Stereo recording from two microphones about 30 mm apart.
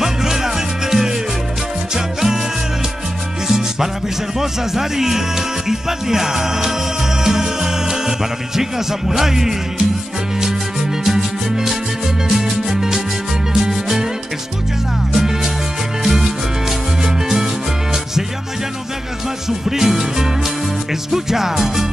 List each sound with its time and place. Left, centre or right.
0.0 s music: centre
3.4 s music: centre
11.1 s music: centre
15.1 s music: centre
19.7 s music: centre